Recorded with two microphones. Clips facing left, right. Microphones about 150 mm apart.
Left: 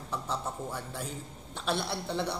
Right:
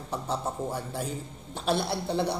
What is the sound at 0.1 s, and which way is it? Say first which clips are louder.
Speech: right 4 dB; 35° right (ahead or behind).